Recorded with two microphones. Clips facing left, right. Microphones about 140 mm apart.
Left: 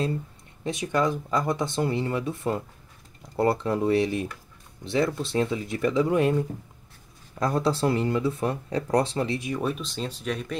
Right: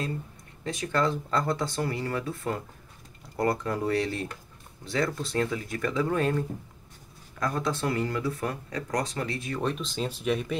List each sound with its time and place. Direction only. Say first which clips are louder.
0.7 s speech: left 2 dB; 20° left (ahead or behind)
7.3 s speech: left 5 dB; 30° left (ahead or behind); by 10.6 s 5° right (ahead or behind)